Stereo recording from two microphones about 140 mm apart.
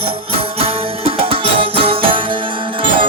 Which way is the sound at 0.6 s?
40° right (ahead or behind).